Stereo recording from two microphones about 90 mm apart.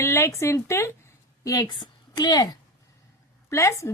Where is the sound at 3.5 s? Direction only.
30° left (ahead or behind).